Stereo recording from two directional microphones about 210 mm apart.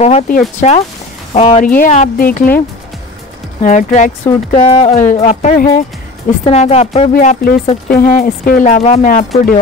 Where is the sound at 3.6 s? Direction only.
35° left (ahead or behind).